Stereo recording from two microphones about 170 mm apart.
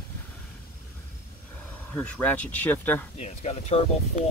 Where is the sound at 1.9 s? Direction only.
10° left (ahead or behind).